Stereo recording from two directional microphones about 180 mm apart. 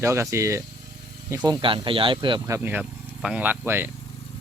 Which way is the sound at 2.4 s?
15° right (ahead or behind).